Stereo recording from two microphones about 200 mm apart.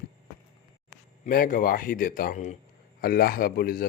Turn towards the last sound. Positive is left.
turn(degrees=50)  # may be behind; listen again after turning